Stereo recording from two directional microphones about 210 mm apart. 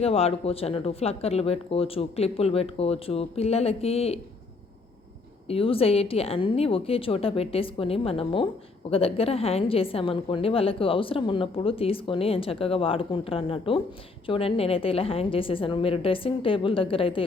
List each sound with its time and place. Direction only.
0.0 s a woman's voice: 30° left (ahead or behind)
5.5 s a woman's voice: 25° left (ahead or behind)